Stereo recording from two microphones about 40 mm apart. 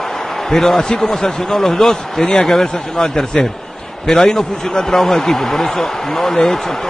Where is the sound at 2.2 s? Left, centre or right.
Left.